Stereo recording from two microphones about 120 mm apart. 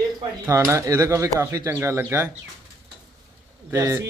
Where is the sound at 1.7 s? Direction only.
20° right (ahead or behind).